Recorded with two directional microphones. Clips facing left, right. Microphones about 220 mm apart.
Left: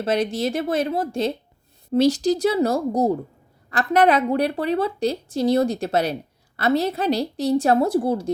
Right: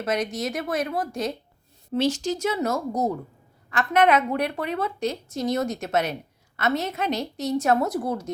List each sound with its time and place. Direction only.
0.0 s a woman's voice: 30° left (ahead or behind)